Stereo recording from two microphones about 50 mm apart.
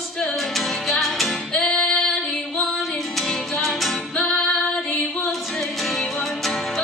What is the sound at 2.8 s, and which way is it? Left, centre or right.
Music, centre.